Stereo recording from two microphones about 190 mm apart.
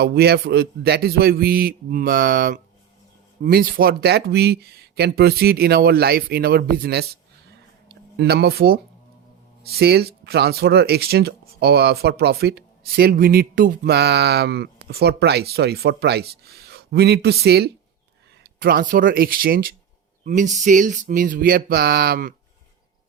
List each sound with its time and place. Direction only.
0.0 s a man's voice: 55° right (ahead or behind)
8.1 s a man's voice: 60° right (ahead or behind)